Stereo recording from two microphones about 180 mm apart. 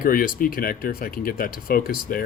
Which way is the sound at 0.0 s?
55° left (ahead or behind).